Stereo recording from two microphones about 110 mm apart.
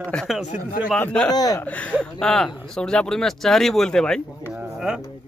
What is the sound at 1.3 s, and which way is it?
Speech, 35° left (ahead or behind).